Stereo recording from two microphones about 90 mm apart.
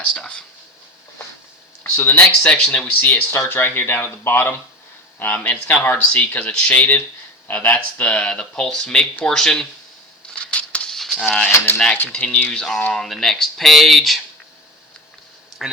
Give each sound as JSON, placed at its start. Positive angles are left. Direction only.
{"t": 0.0, "sound": "a sound", "side_deg": 10}
{"t": 1.8, "sound": "speech", "side_deg": 25}
{"t": 10.3, "sound": "a sound", "side_deg": 15}
{"t": 11.4, "sound": "speech", "side_deg": 25}
{"t": 12.5, "sound": "speech", "side_deg": 5}
{"t": 15.6, "sound": "speech", "side_deg": -5}